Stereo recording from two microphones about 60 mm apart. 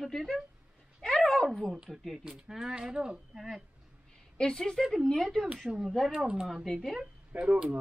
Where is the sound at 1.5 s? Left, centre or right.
Centre.